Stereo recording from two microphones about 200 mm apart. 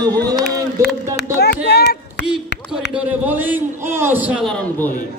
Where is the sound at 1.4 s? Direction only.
55° left (ahead or behind).